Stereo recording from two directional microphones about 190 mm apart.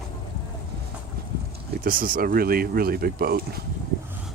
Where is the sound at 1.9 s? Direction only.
45° right (ahead or behind).